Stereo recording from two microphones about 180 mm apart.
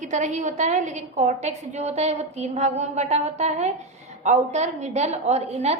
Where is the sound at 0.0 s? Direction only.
40° right (ahead or behind).